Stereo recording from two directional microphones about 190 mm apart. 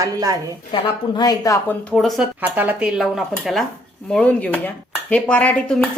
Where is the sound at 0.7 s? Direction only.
20° left (ahead or behind).